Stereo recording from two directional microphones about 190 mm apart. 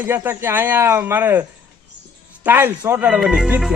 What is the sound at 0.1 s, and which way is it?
Speech, 10° right (ahead or behind).